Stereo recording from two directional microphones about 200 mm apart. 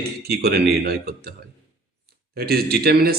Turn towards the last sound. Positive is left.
turn(degrees=-50)  # may be behind; listen again after turning